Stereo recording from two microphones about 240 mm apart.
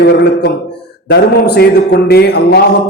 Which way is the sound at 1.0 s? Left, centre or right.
Left.